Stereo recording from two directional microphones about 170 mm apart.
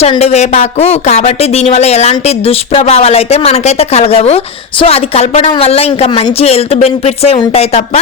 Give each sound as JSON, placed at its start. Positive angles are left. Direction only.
{"t": 0.0, "sound": "speech", "side_deg": 35}